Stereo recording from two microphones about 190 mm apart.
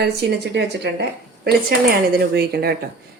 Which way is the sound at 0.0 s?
60° right (ahead or behind).